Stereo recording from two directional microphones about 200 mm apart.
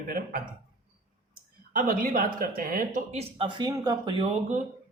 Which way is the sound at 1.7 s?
45° right (ahead or behind).